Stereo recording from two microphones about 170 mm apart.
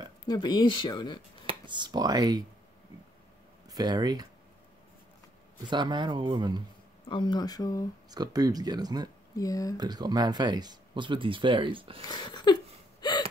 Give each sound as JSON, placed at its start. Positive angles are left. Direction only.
{"t": 0.3, "sound": "speech", "side_deg": 25}
{"t": 1.4, "sound": "speech", "side_deg": -30}
{"t": 3.7, "sound": "speech", "side_deg": -25}
{"t": 5.7, "sound": "speech", "side_deg": -25}
{"t": 7.1, "sound": "speech", "side_deg": 25}
{"t": 8.1, "sound": "speech", "side_deg": -20}
{"t": 9.4, "sound": "speech", "side_deg": 20}
{"t": 9.8, "sound": "speech", "side_deg": -25}
{"t": 12.1, "sound": "speech", "side_deg": 25}
{"t": 13.0, "sound": "gasp", "side_deg": 25}